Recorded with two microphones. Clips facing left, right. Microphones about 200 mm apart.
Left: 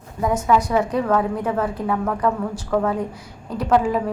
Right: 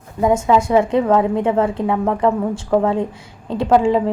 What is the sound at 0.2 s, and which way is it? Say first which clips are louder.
A woman's voice: right 4 dB; 25° right (ahead or behind).